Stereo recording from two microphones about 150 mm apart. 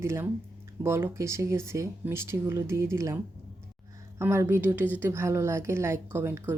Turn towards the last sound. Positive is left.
turn(degrees=-15)  # may be behind; listen again after turning